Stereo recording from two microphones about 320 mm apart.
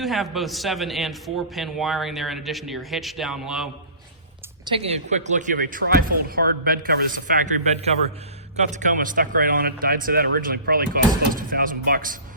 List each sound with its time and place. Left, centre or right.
0.0 s speech: centre
4.6 s speech: centre